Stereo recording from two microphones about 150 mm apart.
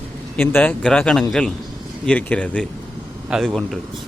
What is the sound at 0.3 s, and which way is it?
A man's voice, 15° left (ahead or behind).